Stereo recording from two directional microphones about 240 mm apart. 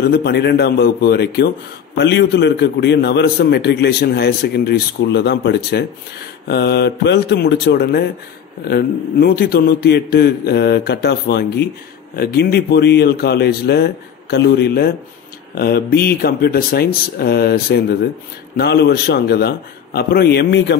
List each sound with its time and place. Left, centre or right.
0.1 s a man's voice: left